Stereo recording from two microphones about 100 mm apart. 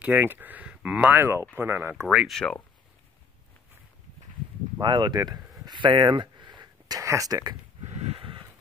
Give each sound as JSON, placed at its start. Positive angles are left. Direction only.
{"t": 0.0, "sound": "speech", "side_deg": -20}
{"t": 2.0, "sound": "speech", "side_deg": -5}
{"t": 2.3, "sound": "speech", "side_deg": 10}
{"t": 4.7, "sound": "speech", "side_deg": -50}
{"t": 7.8, "sound": "a sound", "side_deg": -90}